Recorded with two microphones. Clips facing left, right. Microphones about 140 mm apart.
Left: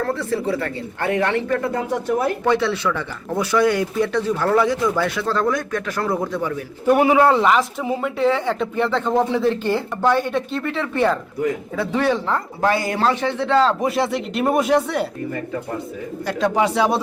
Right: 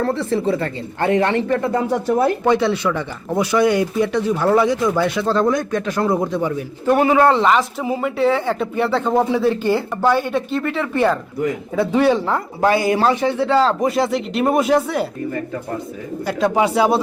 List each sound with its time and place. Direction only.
0.0 s speech: 25° right (ahead or behind)
2.5 s speech: 15° right (ahead or behind)
6.8 s speech: 10° left (ahead or behind)
11.8 s speech: 15° right (ahead or behind)
16.2 s speech: 5° right (ahead or behind)